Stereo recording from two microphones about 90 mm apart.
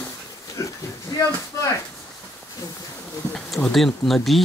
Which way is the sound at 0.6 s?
35° left (ahead or behind).